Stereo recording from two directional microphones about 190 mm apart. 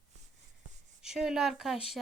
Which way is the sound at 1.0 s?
5° right (ahead or behind).